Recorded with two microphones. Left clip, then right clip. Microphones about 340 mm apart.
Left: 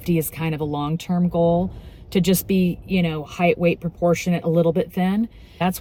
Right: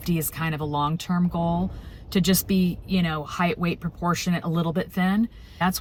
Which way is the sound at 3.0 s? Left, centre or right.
Left.